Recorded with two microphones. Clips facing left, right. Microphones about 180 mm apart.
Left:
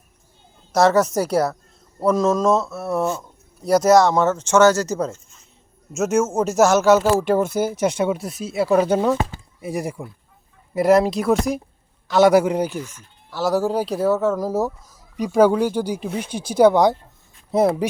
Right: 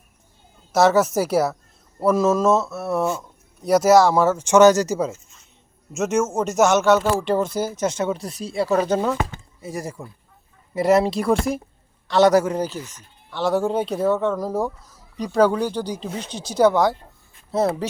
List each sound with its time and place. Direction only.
0.7 s speech: 5° right (ahead or behind)
4.9 s speech: 5° right (ahead or behind); by 10.1 s 15° left (ahead or behind)
10.8 s speech: centre (ahead or behind)